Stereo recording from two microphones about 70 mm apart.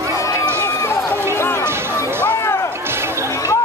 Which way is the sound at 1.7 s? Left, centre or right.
Right.